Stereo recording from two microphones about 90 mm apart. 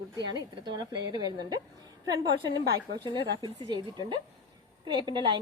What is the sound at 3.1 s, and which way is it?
Speech, 60° right (ahead or behind).